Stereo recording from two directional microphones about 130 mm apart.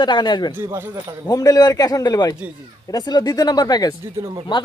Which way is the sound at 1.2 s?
30° left (ahead or behind).